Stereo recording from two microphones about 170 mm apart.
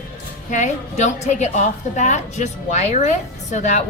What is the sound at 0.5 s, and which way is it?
A woman's voice, 45° left (ahead or behind).